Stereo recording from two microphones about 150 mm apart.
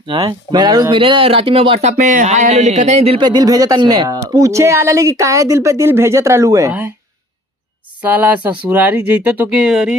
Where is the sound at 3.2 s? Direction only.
25° right (ahead or behind).